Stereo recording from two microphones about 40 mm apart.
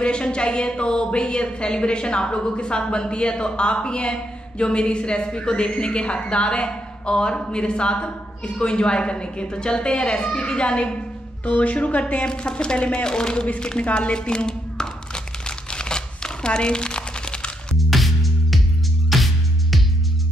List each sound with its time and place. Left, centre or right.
0.0 s a woman's voice: left
11.4 s speech: left
12.3 s a woman's voice: left
13.6 s a sound: left
17.7 s music: centre